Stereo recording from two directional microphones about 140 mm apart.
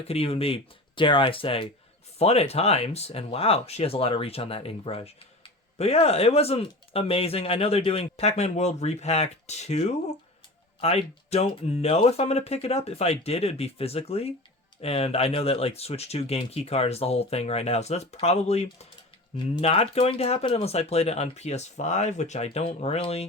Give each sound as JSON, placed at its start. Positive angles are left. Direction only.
{"t": 0.0, "sound": "speech", "side_deg": 45}